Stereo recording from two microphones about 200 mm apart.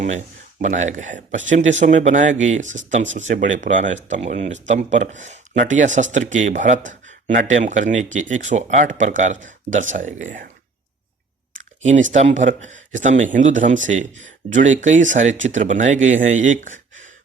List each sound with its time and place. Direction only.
0.6 s speech: 35° right (ahead or behind)
12.1 s speech: 40° right (ahead or behind)